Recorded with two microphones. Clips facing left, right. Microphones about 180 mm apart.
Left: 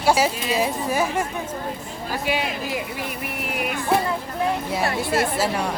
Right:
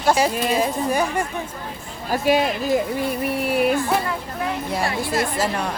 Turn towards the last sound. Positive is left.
turn(degrees=10)  # may be behind; listen again after turning